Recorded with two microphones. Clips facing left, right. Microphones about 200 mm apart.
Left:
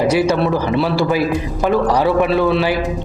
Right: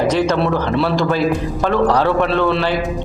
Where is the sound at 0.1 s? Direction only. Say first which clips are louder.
Left 1 dB; 10° left (ahead or behind).